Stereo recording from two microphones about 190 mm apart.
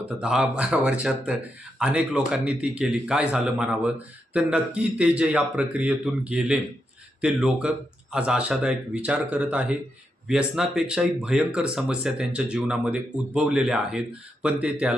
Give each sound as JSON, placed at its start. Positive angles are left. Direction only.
{"t": 0.2, "sound": "speech", "side_deg": -5}